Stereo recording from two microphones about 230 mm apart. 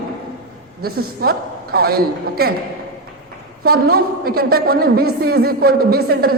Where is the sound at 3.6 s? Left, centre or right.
Right.